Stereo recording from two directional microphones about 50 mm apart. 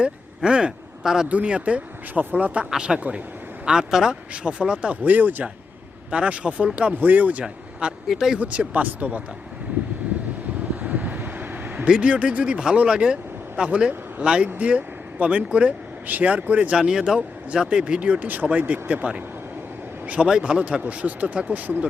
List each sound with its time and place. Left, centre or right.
0.0 s speech: right
1.3 s speech: right
2.6 s speech: centre
5.0 s speech: right
7.4 s speech: centre
8.0 s speech: centre
8.4 s speech: right
10.8 s vehicle: right
11.9 s speech: right
16.7 s speech: centre
20.2 s speech: centre